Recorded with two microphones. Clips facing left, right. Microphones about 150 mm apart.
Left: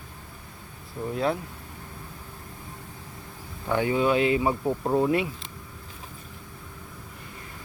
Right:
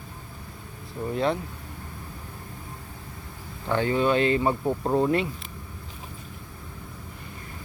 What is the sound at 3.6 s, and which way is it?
Speech, 10° left (ahead or behind).